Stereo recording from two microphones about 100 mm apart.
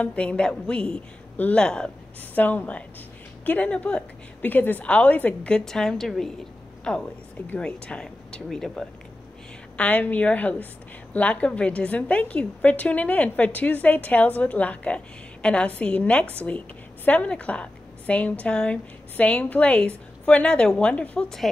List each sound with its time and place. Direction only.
0.0 s a woman's voice: 15° left (ahead or behind)
9.8 s a woman's voice: 15° left (ahead or behind)